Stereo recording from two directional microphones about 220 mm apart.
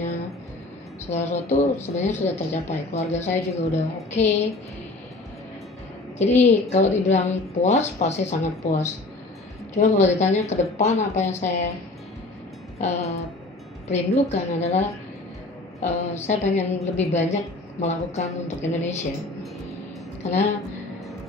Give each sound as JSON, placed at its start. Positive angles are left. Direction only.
{"t": 1.1, "sound": "a woman's voice", "side_deg": 30}
{"t": 6.2, "sound": "a woman's voice", "side_deg": 30}
{"t": 12.7, "sound": "a woman's voice", "side_deg": 30}
{"t": 20.2, "sound": "a woman's voice", "side_deg": 30}